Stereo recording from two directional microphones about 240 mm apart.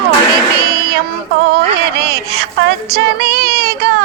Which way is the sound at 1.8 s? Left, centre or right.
Right.